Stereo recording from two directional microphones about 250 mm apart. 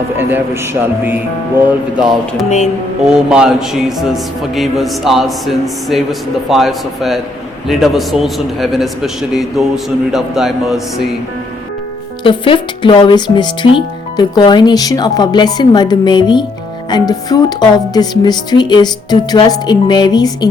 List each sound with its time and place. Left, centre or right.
0.2 s a man's voice: centre
3.0 s a man's voice: centre
12.2 s speech: centre